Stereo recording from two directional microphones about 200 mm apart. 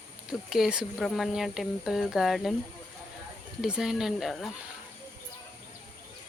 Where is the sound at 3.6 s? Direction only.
5° right (ahead or behind).